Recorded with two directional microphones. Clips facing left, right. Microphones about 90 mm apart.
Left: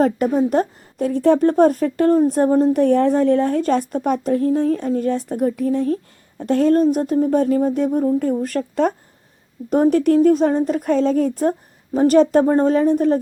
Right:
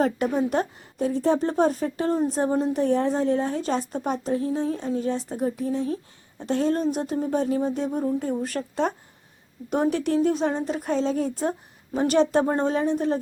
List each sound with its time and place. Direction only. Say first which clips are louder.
0.3 s a woman's voice: left 6 dB; 40° left (ahead or behind)
0.9 s a woman's voice: left 6 dB; 60° left (ahead or behind)